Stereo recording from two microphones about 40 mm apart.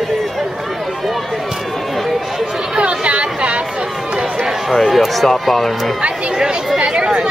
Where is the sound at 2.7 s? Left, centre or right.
Right.